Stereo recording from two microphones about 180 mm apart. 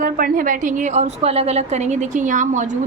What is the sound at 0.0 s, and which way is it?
A woman's voice, 50° right (ahead or behind).